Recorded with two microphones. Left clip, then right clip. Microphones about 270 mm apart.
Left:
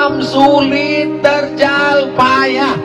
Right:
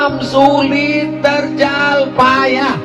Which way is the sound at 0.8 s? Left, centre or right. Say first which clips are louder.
Left 1 dB; left.